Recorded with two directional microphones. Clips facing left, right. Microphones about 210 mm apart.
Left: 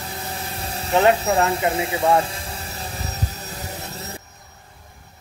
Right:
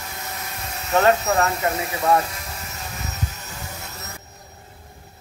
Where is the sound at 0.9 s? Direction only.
15° left (ahead or behind).